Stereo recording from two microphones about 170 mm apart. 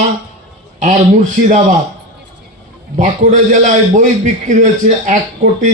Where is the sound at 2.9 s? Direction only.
45° right (ahead or behind).